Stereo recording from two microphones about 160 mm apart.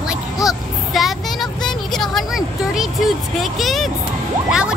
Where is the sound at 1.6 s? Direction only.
Centre (ahead or behind).